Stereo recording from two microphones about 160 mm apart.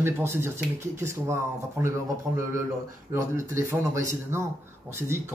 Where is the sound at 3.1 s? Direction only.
15° right (ahead or behind).